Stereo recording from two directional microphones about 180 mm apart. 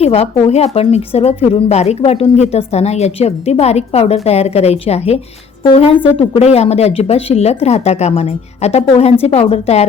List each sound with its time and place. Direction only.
0.0 s a woman's voice: 35° left (ahead or behind)